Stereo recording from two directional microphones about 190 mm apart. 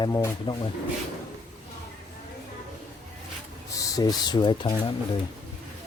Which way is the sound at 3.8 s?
20° left (ahead or behind).